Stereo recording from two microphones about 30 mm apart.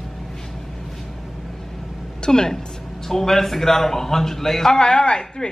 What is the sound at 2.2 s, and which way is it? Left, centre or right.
Speech, left.